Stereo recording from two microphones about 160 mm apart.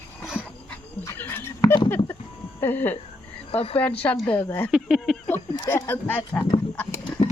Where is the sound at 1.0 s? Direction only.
15° left (ahead or behind).